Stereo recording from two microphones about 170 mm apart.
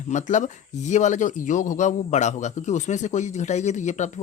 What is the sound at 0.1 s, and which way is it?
Speech, 45° left (ahead or behind).